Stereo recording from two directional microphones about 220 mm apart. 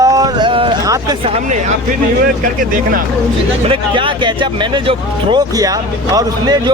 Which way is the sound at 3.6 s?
25° right (ahead or behind).